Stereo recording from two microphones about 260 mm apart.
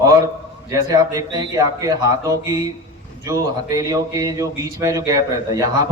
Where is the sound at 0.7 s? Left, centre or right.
Centre.